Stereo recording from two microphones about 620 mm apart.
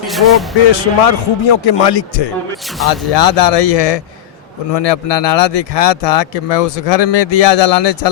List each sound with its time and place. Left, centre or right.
0.7 s a man's voice: left